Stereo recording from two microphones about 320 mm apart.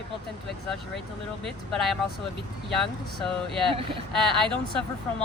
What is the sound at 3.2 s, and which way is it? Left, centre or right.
Speech, centre.